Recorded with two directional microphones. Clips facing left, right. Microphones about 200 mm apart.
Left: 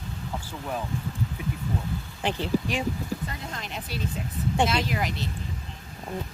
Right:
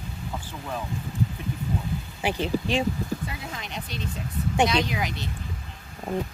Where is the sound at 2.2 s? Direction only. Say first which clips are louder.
Even; 10° right (ahead or behind).